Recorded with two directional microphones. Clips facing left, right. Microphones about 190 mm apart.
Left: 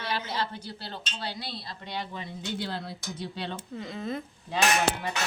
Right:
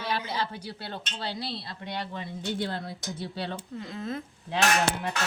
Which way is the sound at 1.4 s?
30° right (ahead or behind).